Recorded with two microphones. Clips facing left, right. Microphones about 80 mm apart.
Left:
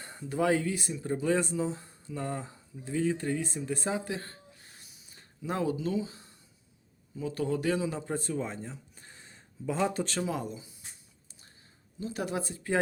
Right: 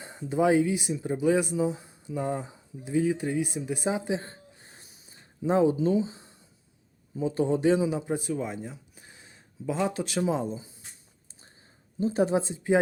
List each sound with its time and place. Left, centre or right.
0.0 s speech: centre
10.2 s speech: right
11.9 s speech: right